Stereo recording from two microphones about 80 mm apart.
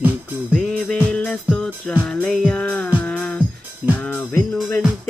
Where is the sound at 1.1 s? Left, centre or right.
Centre.